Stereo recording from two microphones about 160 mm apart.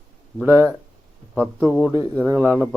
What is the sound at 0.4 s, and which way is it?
Speech, 15° right (ahead or behind).